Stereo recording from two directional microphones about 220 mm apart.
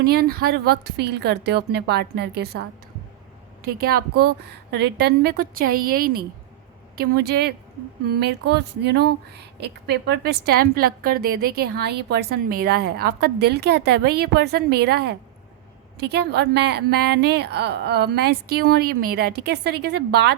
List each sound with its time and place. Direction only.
0.0 s speech: 45° right (ahead or behind)